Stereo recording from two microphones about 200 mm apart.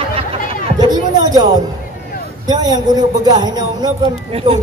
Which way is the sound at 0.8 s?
20° right (ahead or behind).